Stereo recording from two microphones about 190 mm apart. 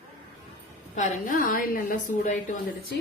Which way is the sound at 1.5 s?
45° left (ahead or behind).